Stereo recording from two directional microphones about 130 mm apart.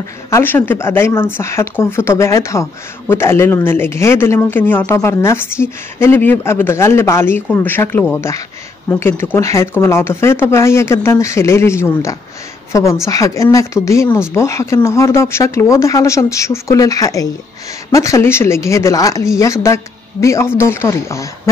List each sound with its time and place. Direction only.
0.3 s speech: 15° left (ahead or behind)